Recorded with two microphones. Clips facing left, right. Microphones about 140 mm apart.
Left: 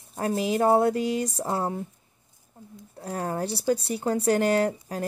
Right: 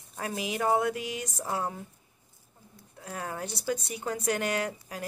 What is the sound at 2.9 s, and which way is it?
Speech, 40° left (ahead or behind).